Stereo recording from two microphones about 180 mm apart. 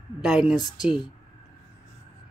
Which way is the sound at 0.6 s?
20° left (ahead or behind).